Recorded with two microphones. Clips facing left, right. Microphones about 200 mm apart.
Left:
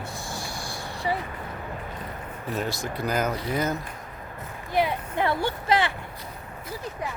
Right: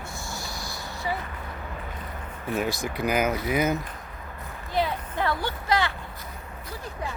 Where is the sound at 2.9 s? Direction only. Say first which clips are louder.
Right 2 dB; 15° right (ahead or behind).